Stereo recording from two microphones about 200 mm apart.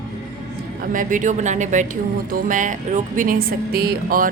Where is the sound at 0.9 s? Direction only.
40° right (ahead or behind).